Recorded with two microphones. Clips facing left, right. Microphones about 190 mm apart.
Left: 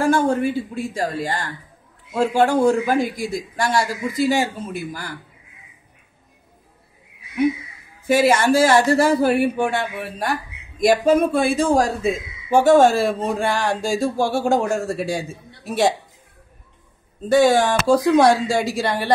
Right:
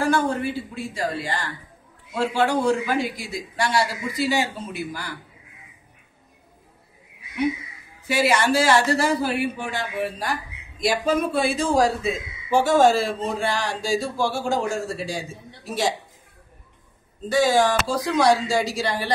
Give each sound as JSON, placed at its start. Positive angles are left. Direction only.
{"t": 0.0, "sound": "a man's voice", "side_deg": 50}
{"t": 8.1, "sound": "a man's voice", "side_deg": 50}
{"t": 17.3, "sound": "speech", "side_deg": 60}